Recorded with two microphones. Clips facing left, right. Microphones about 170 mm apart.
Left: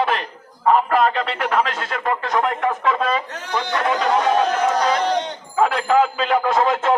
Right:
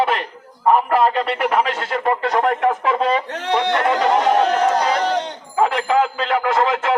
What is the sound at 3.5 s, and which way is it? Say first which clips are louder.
A man's voice: right 4 dB; 25° right (ahead or behind).